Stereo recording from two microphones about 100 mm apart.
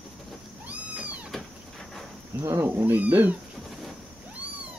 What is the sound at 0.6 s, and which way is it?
Cat, 15° right (ahead or behind).